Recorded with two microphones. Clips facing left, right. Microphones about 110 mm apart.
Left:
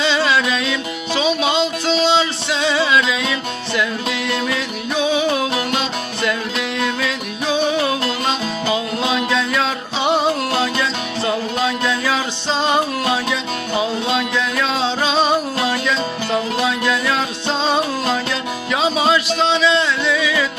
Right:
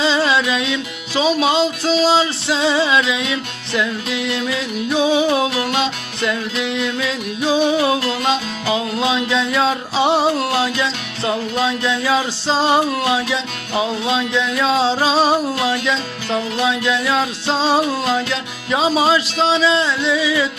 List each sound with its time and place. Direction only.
0.0 s music: 30° right (ahead or behind)
1.2 s music: 40° right (ahead or behind)
16.6 s music: 25° right (ahead or behind)